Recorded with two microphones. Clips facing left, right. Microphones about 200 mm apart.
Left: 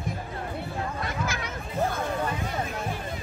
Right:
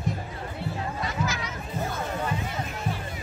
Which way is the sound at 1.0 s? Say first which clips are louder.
Right 1 dB; 55° left (ahead or behind).